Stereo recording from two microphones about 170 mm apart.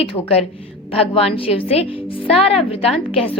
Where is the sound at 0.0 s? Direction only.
35° left (ahead or behind).